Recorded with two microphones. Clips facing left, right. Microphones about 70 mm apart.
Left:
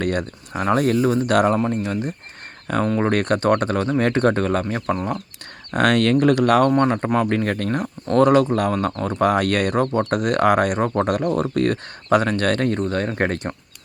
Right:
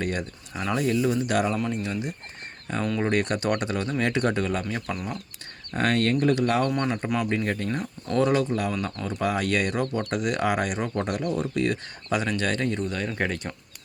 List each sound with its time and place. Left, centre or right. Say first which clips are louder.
0.0 s speech: left 6 dB; left
1.5 s speech: left 6 dB; left
5.7 s speech: left 6 dB; left
6.7 s speech: left 8 dB; left
7.3 s speech: left 5 dB; left